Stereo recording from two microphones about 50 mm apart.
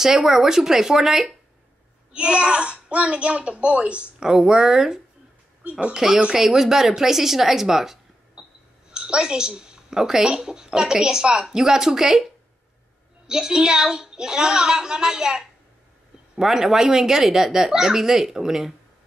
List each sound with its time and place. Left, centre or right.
0.0 s a woman's voice: centre
2.1 s a woman's voice: right
5.6 s speech: right
5.9 s a woman's voice: centre
13.3 s a woman's voice: centre